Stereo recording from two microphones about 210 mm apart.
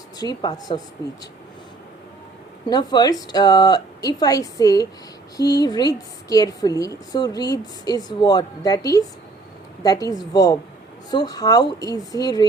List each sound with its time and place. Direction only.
0.2 s speech: 20° left (ahead or behind)
2.6 s a woman's voice: 20° left (ahead or behind)